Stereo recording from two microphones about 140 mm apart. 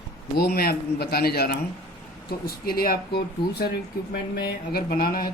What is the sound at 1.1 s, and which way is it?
Speech, 90° left.